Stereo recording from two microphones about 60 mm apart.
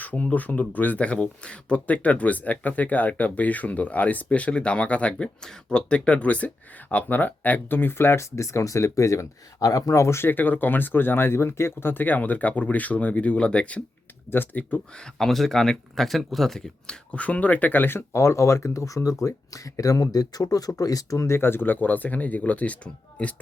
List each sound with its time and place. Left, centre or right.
0.0 s speech: left
14.3 s speech: left
15.2 s speech: centre; by 18.0 s left
18.1 s speech: left
21.2 s speech: left